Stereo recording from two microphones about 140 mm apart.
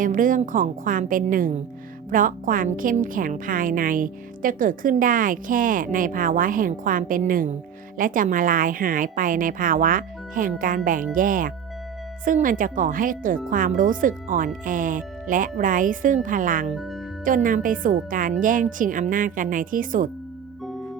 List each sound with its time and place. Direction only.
0.0 s a woman's voice: 70° right (ahead or behind)